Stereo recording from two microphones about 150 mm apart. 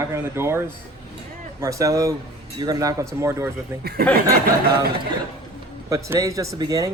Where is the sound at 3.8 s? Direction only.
90° right.